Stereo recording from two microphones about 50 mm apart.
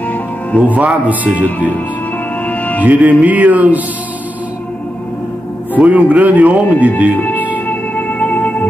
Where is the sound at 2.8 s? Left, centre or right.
Right.